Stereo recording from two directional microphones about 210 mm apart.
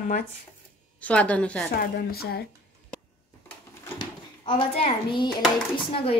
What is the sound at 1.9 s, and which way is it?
Speech, 50° left (ahead or behind).